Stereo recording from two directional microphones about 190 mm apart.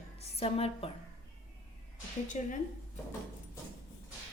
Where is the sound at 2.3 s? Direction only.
40° left (ahead or behind).